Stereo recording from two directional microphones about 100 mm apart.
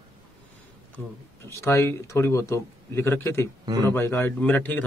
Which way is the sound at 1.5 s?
30° left (ahead or behind).